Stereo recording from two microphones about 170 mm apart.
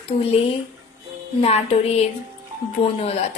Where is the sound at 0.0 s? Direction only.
35° left (ahead or behind).